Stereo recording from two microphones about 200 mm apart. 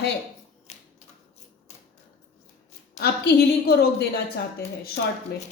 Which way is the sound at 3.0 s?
55° left (ahead or behind).